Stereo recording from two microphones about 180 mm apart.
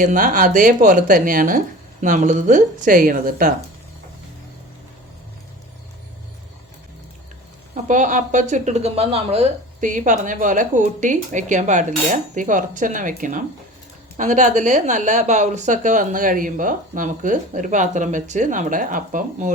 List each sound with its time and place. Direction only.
0.0 s speech: 45° right (ahead or behind)
7.9 s speech: 45° right (ahead or behind)